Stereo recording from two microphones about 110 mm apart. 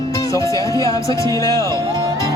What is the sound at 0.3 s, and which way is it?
Music, 30° left (ahead or behind).